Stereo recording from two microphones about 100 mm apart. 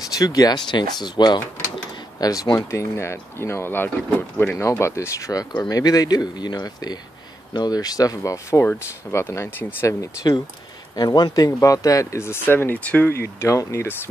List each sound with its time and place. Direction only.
0.2 s speech: 40° left (ahead or behind)
2.7 s speech: 30° left (ahead or behind)
9.8 s speech: 40° left (ahead or behind)